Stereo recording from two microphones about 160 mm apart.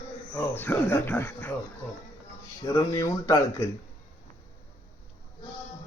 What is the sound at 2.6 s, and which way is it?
Speech, 25° left (ahead or behind).